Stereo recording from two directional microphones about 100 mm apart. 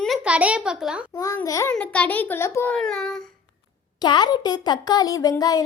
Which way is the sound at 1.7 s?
10° left (ahead or behind).